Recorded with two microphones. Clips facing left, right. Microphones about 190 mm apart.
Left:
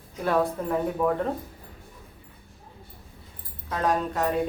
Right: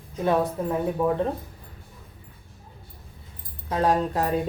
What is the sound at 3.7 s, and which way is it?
Speech, 30° right (ahead or behind).